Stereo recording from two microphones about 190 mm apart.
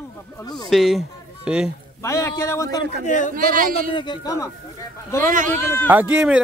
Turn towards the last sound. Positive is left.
turn(degrees=-5)  # may be behind; listen again after turning